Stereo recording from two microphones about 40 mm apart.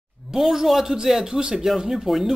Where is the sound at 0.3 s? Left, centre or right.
Centre.